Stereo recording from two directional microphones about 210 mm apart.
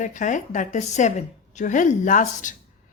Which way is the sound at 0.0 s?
35° left (ahead or behind).